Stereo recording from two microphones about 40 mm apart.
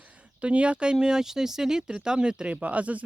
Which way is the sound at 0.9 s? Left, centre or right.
Centre.